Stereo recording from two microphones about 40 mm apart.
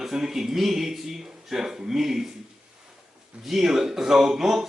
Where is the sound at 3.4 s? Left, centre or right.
Centre.